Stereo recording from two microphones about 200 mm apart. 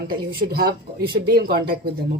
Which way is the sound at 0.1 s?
45° right (ahead or behind).